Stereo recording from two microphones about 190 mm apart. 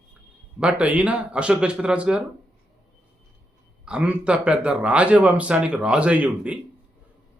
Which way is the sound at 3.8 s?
5° right (ahead or behind).